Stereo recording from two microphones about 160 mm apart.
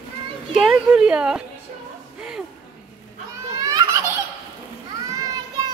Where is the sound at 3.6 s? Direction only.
20° right (ahead or behind).